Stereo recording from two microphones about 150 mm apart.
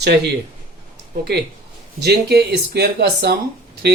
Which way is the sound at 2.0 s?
90° right.